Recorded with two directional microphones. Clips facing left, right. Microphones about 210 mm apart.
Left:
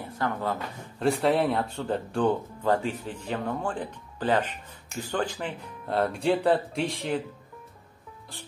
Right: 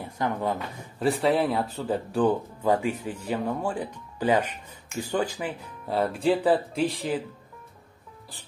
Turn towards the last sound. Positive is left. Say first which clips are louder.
# right 2 dB
turn(degrees=0)  # may be behind; listen again after turning